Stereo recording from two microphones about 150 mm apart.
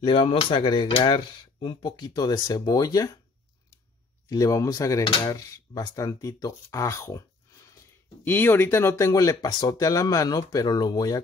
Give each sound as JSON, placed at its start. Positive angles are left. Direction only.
{"t": 0.0, "sound": "speech", "side_deg": 35}
{"t": 4.3, "sound": "speech", "side_deg": 25}